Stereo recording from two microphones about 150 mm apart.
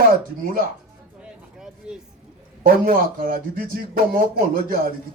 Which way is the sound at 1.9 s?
5° right (ahead or behind).